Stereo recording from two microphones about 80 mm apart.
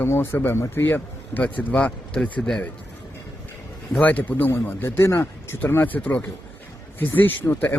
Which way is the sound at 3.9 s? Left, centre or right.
Centre.